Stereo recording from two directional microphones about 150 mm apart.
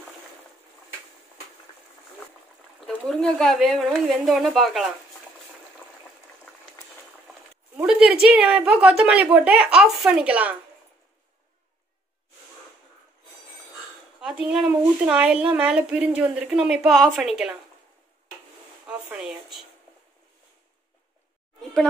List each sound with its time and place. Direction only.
2.9 s a woman's voice: 5° left (ahead or behind)
5.8 s boiling: 5° right (ahead or behind)
7.8 s speech: 5° right (ahead or behind)
14.2 s a woman's voice: 5° right (ahead or behind)
18.9 s speech: 5° right (ahead or behind)